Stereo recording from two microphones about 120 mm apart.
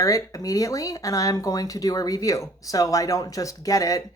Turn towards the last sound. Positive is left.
turn(degrees=30)  # may be behind; listen again after turning